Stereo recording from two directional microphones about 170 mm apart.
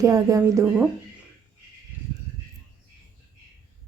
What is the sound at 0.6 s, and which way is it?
Speech, 10° right (ahead or behind).